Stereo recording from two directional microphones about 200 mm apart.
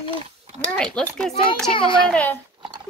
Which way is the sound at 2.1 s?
5° left (ahead or behind).